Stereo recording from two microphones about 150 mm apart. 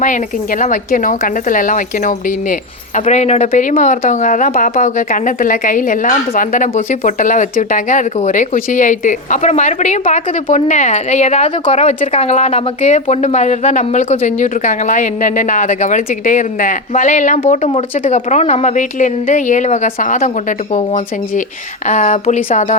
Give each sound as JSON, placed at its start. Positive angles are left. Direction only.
{"t": 0.0, "sound": "speech", "side_deg": 60}